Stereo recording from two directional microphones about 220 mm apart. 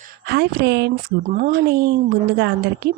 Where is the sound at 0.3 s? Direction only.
45° right (ahead or behind).